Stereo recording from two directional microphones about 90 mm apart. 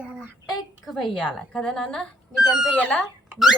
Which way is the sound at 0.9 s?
5° left (ahead or behind).